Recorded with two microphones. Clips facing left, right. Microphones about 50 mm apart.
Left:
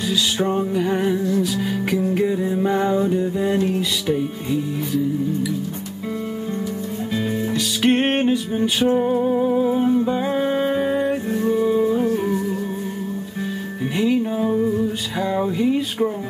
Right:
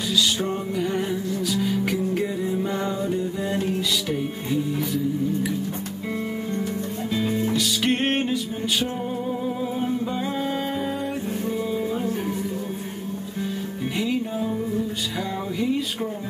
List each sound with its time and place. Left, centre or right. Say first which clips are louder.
0.1 s music: left 2 dB; left
7.2 s music: even; centre
14.4 s music: left 7 dB; left
15.6 s a sound: left 3 dB; centre